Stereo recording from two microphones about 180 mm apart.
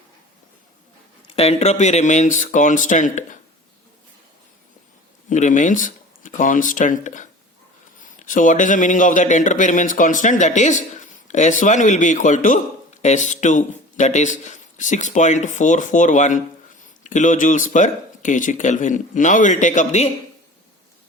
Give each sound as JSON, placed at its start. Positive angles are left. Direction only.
{"t": 1.3, "sound": "speech", "side_deg": 35}
{"t": 5.3, "sound": "speech", "side_deg": 45}